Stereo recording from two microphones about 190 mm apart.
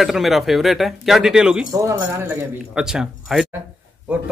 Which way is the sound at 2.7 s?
5° right (ahead or behind).